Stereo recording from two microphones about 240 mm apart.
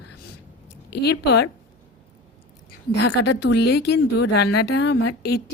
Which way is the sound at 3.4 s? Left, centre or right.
Left.